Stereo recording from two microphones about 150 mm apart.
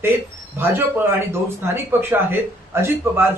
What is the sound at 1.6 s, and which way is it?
Speech, 15° right (ahead or behind).